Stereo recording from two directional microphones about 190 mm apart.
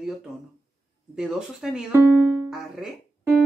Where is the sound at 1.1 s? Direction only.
5° right (ahead or behind).